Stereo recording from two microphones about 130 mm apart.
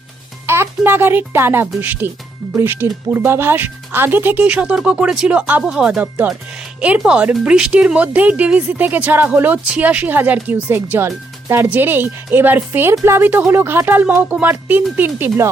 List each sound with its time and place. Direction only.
0.4 s a child's voice: 20° right (ahead or behind)